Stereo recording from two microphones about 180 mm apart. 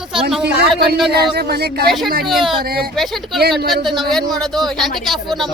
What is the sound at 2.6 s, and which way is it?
Speech, 55° right (ahead or behind).